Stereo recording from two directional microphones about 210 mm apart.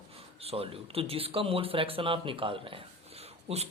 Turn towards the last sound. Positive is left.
turn(degrees=-30)  # may be behind; listen again after turning